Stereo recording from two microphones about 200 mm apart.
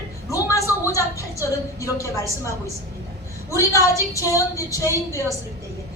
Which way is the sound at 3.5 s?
15° left (ahead or behind).